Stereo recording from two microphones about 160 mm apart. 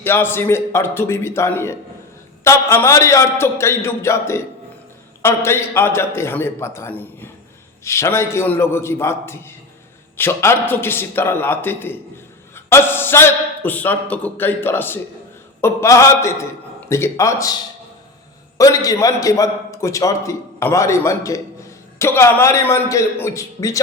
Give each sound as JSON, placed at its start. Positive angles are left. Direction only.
{"t": 0.0, "sound": "a man's voice", "side_deg": 15}